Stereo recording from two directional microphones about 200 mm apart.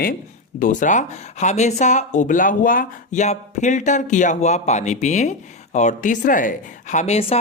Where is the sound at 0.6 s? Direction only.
40° left (ahead or behind).